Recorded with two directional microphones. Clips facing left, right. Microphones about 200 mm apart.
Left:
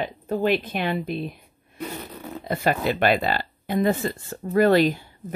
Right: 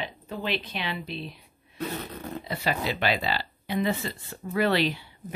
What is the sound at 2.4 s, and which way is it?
Speech, 50° left (ahead or behind).